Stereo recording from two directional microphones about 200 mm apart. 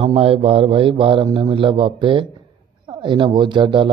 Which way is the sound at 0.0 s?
30° right (ahead or behind).